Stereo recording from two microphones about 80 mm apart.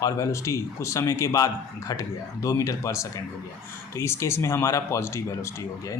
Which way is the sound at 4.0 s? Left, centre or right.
Left.